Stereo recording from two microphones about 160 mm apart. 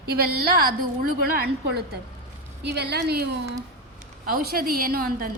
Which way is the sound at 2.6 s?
90° right.